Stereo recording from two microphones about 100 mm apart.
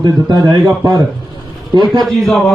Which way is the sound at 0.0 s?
45° right (ahead or behind).